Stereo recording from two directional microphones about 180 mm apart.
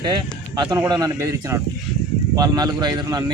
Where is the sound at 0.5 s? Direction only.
25° right (ahead or behind).